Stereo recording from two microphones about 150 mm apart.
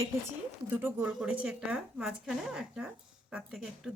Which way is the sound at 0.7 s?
10° right (ahead or behind).